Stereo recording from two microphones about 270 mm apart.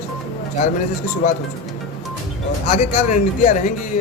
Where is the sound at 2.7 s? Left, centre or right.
Left.